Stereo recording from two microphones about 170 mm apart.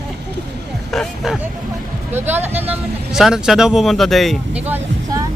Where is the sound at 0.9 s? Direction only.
Centre (ahead or behind).